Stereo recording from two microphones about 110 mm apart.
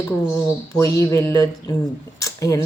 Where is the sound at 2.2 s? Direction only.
30° left (ahead or behind).